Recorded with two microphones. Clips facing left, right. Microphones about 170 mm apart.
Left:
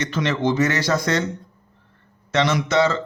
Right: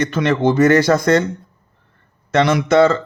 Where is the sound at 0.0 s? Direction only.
55° right (ahead or behind).